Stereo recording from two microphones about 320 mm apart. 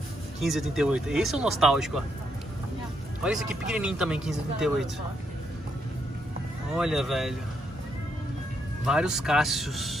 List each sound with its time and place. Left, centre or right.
0.4 s speech: centre
3.3 s speech: centre
6.7 s speech: centre
8.8 s speech: centre